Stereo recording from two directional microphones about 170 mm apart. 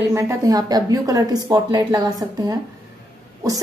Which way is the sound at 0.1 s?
15° right (ahead or behind).